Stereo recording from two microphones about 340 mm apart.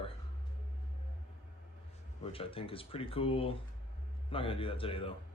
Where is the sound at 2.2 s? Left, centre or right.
Centre.